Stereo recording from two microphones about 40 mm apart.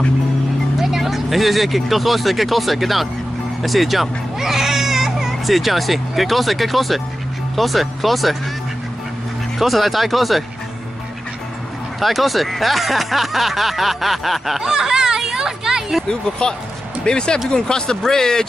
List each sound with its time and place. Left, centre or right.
0.7 s speech: centre
9.6 s speech: centre
12.0 s speech: centre
16.1 s speech: left